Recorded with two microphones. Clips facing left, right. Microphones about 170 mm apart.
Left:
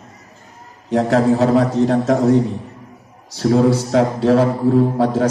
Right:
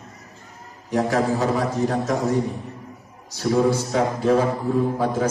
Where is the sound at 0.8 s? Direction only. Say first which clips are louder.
Left 6 dB; 65° left (ahead or behind).